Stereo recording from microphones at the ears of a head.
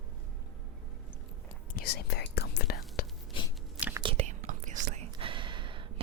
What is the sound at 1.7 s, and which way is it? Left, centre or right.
Whispering, left.